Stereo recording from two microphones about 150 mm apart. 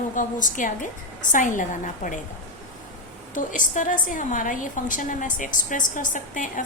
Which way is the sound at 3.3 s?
60° left (ahead or behind).